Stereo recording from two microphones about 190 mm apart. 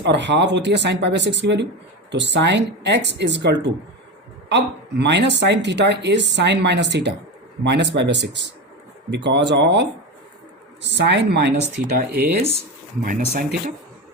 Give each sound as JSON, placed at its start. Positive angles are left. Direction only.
{"t": 0.0, "sound": "speech", "side_deg": -65}
{"t": 10.9, "sound": "speech", "side_deg": -65}